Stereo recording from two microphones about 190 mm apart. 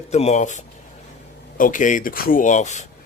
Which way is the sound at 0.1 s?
35° left (ahead or behind).